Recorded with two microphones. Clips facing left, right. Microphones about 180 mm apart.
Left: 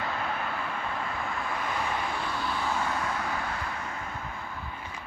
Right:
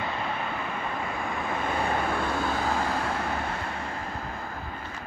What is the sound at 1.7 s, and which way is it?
Vehicle, 50° right (ahead or behind).